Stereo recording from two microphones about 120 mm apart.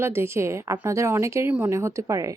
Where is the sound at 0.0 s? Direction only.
20° right (ahead or behind).